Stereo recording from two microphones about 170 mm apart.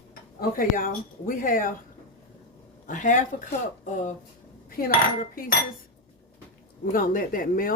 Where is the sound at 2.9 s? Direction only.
50° left (ahead or behind).